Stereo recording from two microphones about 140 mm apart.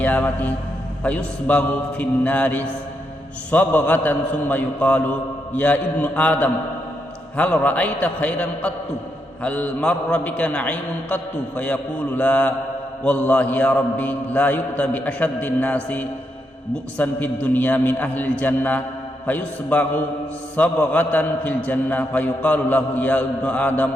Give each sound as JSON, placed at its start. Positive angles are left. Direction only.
{"t": 0.0, "sound": "a man's voice", "side_deg": 10}